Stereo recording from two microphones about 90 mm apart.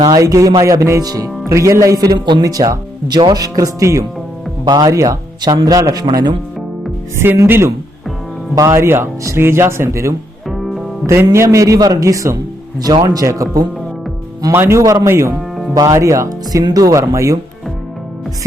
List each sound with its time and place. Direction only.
0.2 s speech: 40° right (ahead or behind)
4.6 s speech: 50° right (ahead or behind)
4.9 s speech: 35° right (ahead or behind)
5.4 s speech: 50° right (ahead or behind)
7.4 s speech: 25° right (ahead or behind)
8.5 s speech: 35° right (ahead or behind)
10.5 s music: centre (ahead or behind)
11.0 s speech: 30° right (ahead or behind)
14.5 s speech: 25° right (ahead or behind)
14.8 s speech: 35° right (ahead or behind)
15.4 s music: centre (ahead or behind)
15.7 s speech: 40° right (ahead or behind)